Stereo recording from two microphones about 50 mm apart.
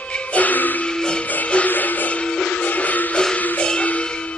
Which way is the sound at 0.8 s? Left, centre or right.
Centre.